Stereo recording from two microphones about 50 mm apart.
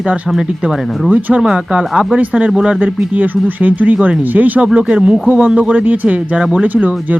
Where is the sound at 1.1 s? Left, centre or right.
Right.